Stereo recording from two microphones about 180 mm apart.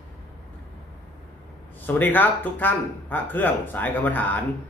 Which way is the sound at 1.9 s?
10° left (ahead or behind).